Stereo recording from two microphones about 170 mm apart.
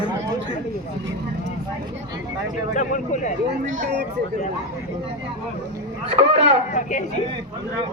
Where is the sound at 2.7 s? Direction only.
45° left (ahead or behind).